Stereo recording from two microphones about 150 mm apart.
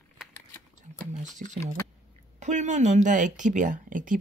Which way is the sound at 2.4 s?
55° right (ahead or behind).